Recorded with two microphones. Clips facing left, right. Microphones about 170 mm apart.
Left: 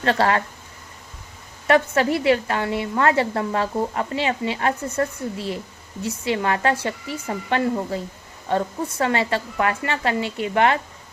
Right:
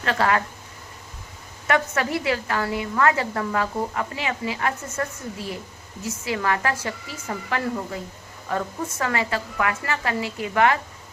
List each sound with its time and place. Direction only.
0.0 s speech: 30° left (ahead or behind)
1.6 s a woman's voice: 30° left (ahead or behind)